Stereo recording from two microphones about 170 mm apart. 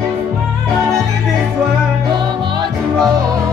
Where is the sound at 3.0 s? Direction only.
25° right (ahead or behind).